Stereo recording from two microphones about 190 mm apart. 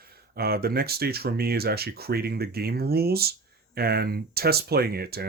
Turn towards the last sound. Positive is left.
turn(degrees=-55)  # may be behind; listen again after turning